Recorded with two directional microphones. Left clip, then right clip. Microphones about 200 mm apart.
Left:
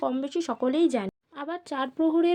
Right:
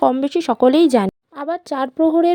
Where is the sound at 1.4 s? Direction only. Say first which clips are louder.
Right 9 dB; 35° right (ahead or behind).